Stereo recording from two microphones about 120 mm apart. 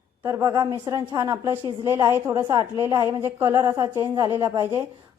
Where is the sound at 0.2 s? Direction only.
25° right (ahead or behind).